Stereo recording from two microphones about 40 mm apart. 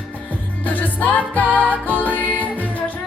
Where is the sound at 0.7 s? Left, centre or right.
Left.